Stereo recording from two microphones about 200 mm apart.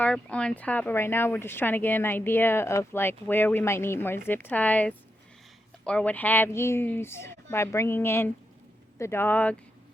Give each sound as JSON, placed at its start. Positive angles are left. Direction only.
{"t": 0.0, "sound": "speech", "side_deg": 5}